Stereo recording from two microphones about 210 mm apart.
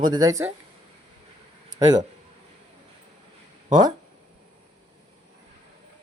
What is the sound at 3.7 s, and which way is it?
Speech, 20° right (ahead or behind).